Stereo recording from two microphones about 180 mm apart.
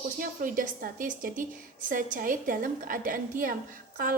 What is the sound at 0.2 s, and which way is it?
A woman's voice, 50° right (ahead or behind).